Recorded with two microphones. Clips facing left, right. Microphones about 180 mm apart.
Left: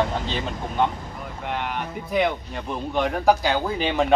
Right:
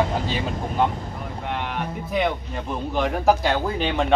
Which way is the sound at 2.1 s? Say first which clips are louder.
Left 1 dB; centre (ahead or behind).